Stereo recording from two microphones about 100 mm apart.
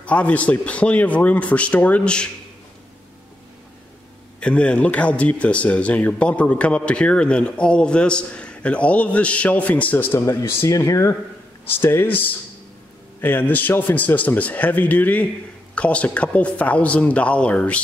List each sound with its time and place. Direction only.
0.0 s speech: 15° left (ahead or behind)
4.4 s speech: 10° left (ahead or behind)